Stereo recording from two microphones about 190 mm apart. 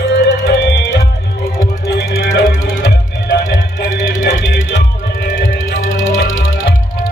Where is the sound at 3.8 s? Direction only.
45° left (ahead or behind).